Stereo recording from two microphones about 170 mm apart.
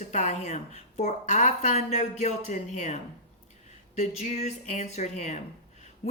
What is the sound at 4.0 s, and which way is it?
Speech, 40° left (ahead or behind).